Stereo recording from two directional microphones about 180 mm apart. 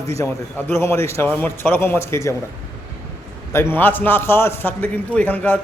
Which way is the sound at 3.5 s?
10° left (ahead or behind).